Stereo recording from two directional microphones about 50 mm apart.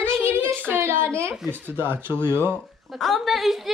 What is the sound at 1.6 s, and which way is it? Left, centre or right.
Speech, right.